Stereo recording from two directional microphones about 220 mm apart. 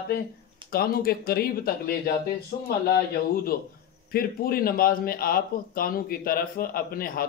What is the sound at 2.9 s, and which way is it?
Speech, 40° left (ahead or behind).